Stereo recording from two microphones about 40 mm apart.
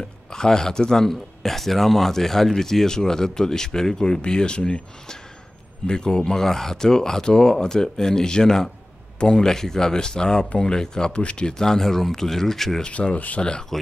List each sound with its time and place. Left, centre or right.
0.3 s speech: centre
12.8 s speech: left
13.4 s speech: left